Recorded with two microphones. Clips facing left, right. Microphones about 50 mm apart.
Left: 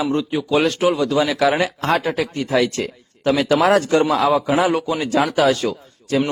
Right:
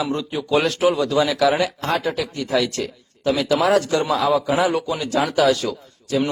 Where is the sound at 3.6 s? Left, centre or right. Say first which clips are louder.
Left 3 dB; left.